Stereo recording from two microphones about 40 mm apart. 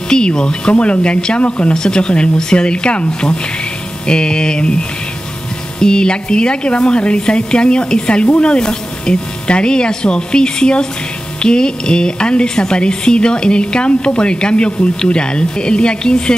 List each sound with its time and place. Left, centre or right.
0.1 s speech: centre